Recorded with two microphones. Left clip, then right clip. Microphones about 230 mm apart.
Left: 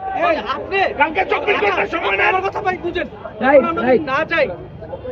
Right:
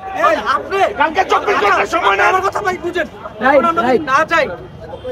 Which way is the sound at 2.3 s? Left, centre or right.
Right.